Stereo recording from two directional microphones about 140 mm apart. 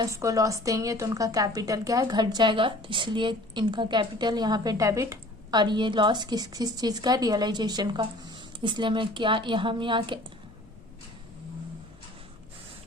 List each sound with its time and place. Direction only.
0.0 s a woman's voice: 20° right (ahead or behind)